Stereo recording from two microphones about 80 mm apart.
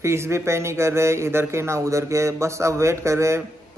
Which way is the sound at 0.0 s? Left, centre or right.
Right.